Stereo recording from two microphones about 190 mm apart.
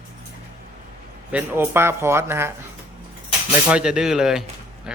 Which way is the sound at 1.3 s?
10° right (ahead or behind).